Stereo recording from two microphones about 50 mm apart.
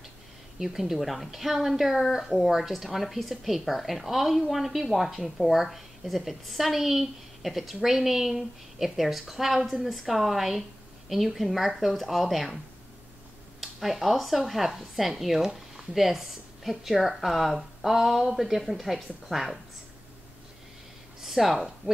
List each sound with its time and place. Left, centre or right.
0.6 s a woman's voice: centre
13.6 s a woman's voice: centre
21.2 s speech: centre